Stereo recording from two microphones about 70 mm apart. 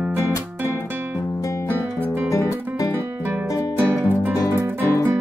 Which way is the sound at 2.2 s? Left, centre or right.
Left.